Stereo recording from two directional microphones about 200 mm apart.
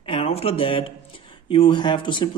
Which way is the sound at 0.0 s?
30° left (ahead or behind).